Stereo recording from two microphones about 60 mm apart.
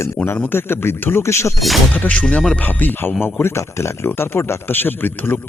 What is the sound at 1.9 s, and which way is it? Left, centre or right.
Speech, left.